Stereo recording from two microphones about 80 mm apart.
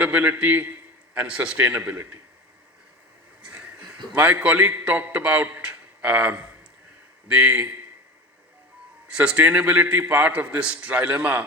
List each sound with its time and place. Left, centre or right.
0.0 s a man's voice: centre
4.1 s a man's voice: centre
5.6 s a sound: centre
7.3 s a man's voice: centre
9.0 s a man's voice: centre